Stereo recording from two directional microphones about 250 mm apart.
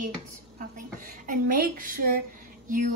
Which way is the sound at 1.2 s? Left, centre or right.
Right.